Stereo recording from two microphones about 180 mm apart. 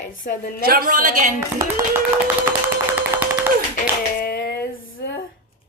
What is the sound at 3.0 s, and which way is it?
Clapping, 10° right (ahead or behind).